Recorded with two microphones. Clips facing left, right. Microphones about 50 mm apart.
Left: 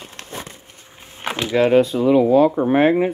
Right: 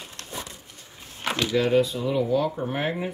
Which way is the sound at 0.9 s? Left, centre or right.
Left.